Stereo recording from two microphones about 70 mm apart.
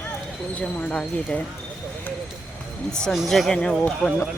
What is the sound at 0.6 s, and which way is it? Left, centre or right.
Speech, centre.